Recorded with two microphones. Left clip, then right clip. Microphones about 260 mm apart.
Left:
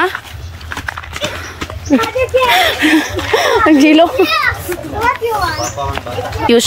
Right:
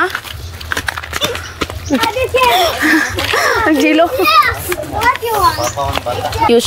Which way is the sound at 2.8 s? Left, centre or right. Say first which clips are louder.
Even; left.